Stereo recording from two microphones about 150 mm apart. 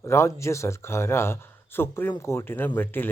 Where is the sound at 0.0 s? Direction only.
20° left (ahead or behind).